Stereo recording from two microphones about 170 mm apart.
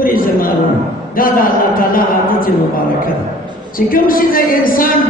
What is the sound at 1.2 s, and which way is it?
Speech, 55° left (ahead or behind).